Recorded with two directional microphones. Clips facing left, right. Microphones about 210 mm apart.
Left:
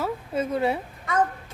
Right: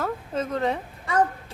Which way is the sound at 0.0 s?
10° left (ahead or behind).